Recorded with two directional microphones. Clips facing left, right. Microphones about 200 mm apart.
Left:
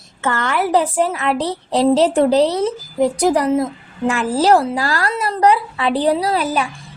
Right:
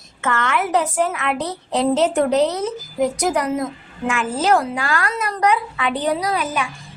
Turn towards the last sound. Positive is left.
turn(degrees=35)  # may be behind; listen again after turning